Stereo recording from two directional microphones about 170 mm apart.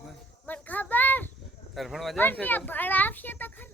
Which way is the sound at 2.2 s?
10° left (ahead or behind).